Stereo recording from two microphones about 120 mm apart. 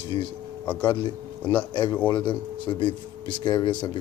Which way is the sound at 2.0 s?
40° left (ahead or behind).